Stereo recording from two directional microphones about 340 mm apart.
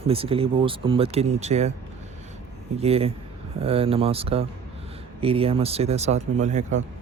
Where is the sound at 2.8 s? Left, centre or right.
Centre.